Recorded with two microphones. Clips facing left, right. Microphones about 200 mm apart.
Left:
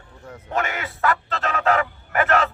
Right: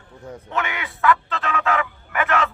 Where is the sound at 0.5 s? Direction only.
40° left (ahead or behind).